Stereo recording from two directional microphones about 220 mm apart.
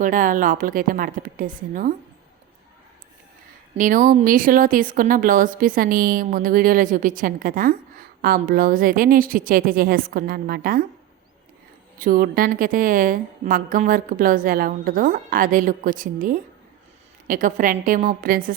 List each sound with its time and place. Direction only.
0.0 s a woman's voice: 35° right (ahead or behind)
3.8 s a woman's voice: 35° right (ahead or behind)
11.9 s a woman's voice: 40° right (ahead or behind)